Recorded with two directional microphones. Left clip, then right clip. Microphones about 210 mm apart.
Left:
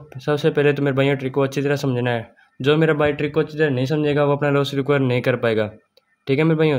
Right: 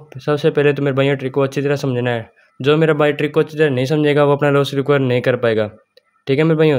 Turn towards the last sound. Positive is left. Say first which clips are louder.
# right 4 dB
turn(degrees=-15)  # may be behind; listen again after turning